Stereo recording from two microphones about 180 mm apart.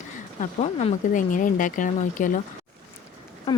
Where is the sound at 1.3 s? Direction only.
45° left (ahead or behind).